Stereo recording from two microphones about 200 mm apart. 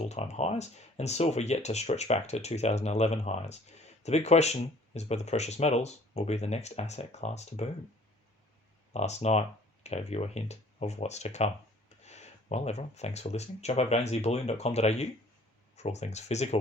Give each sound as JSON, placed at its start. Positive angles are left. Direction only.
{"t": 0.0, "sound": "speech", "side_deg": 35}
{"t": 8.9, "sound": "speech", "side_deg": 35}